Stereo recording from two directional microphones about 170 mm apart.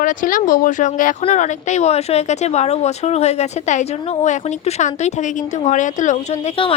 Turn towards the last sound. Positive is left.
turn(degrees=35)  # may be behind; listen again after turning